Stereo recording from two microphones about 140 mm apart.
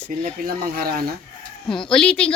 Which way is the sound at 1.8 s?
5° left (ahead or behind).